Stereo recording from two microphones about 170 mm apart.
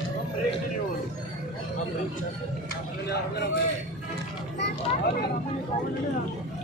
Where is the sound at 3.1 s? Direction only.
75° left (ahead or behind).